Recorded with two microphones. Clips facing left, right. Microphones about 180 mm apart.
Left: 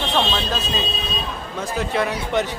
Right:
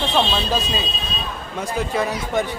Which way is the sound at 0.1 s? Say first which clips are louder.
Right 1 dB; 10° right (ahead or behind).